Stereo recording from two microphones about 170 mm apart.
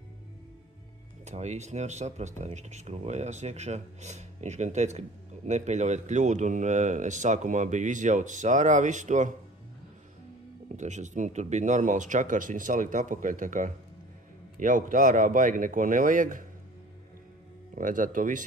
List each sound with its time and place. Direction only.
1.2 s speech: 40° right (ahead or behind)
10.8 s speech: 45° right (ahead or behind)
17.7 s speech: 50° right (ahead or behind)